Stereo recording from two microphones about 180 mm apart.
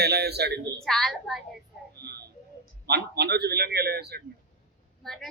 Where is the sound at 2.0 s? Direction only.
65° right (ahead or behind).